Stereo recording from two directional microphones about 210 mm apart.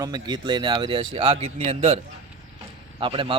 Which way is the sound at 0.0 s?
20° right (ahead or behind).